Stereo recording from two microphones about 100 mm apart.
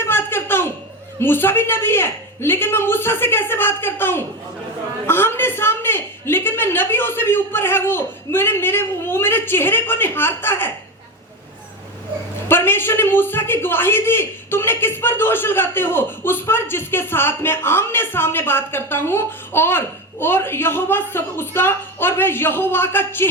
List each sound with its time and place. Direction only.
0.0 s a sound: 25° left (ahead or behind)
1.2 s a man's voice: 20° left (ahead or behind)
12.5 s a man's voice: 25° left (ahead or behind)